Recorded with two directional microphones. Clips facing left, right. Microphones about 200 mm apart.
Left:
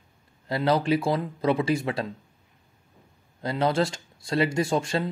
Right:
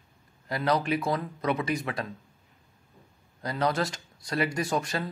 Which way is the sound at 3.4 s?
25° left (ahead or behind).